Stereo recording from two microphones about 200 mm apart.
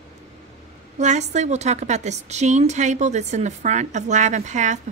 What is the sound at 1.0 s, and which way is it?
A woman's voice, 35° right (ahead or behind).